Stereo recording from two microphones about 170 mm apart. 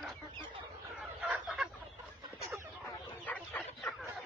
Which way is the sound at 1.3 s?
5° right (ahead or behind).